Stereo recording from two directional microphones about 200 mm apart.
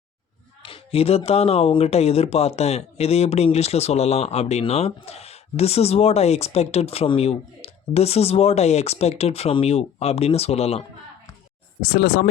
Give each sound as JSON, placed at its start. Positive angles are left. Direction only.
{"t": 0.6, "sound": "speech", "side_deg": 30}
{"t": 11.8, "sound": "speech", "side_deg": 50}